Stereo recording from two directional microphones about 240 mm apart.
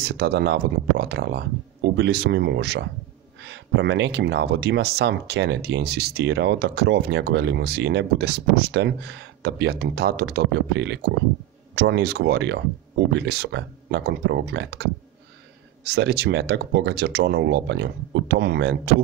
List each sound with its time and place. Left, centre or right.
0.0 s speech: right